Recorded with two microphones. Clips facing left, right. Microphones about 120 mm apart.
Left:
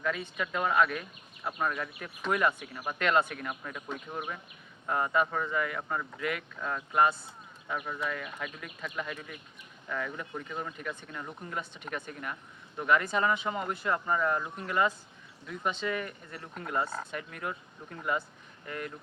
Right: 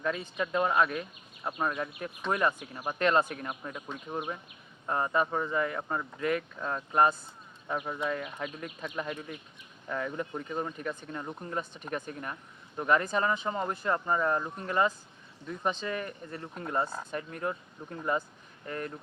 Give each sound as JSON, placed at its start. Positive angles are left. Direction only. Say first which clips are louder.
{"t": 0.0, "sound": "speech", "louder": "right 1 dB", "side_deg": -30}
{"t": 7.8, "sound": "speech", "louder": "right 3 dB", "side_deg": -25}